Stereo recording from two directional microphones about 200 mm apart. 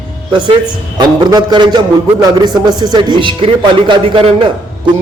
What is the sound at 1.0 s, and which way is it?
A man's voice, 20° right (ahead or behind).